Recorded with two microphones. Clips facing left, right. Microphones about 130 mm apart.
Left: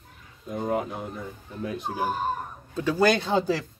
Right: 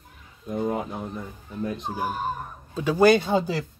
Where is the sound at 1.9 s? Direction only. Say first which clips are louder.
Left 1 dB; 10° right (ahead or behind).